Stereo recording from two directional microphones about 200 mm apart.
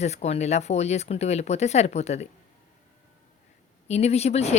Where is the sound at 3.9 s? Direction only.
30° left (ahead or behind).